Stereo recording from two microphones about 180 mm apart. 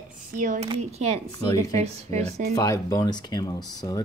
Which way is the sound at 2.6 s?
15° left (ahead or behind).